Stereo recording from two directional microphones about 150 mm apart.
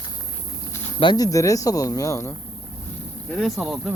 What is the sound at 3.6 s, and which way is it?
Speech, centre (ahead or behind).